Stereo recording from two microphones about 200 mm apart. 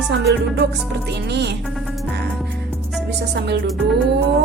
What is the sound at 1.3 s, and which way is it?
Speech, 55° right (ahead or behind).